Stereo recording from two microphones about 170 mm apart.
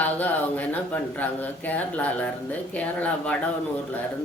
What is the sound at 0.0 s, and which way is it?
Speech, 10° left (ahead or behind).